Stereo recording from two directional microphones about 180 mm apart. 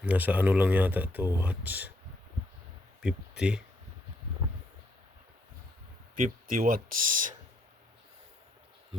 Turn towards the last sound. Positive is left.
turn(degrees=-50)  # may be behind; listen again after turning